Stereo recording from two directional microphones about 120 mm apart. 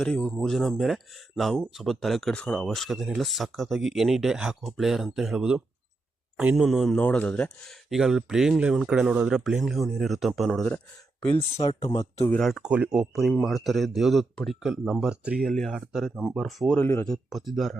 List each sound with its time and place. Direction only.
0.0 s speech: 5° left (ahead or behind)
7.0 s speech: 10° left (ahead or behind)
7.9 s speech: 5° right (ahead or behind)
11.5 s speech: 55° left (ahead or behind)
12.4 s speech: centre (ahead or behind)
16.8 s speech: 20° left (ahead or behind)
17.1 s speech: centre (ahead or behind)